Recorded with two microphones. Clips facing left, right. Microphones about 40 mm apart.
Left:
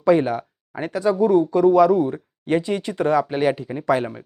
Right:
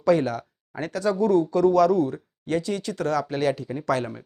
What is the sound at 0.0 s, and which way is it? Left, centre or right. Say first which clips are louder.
Speech: left 4 dB; centre.